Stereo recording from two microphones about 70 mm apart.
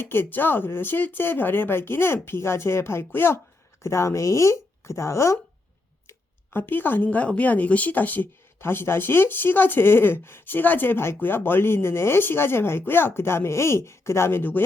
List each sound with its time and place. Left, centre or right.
0.0 s speech: left
3.8 s speech: left
6.1 s speech: left